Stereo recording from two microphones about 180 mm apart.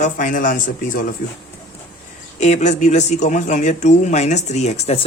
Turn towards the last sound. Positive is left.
turn(degrees=35)  # may be behind; listen again after turning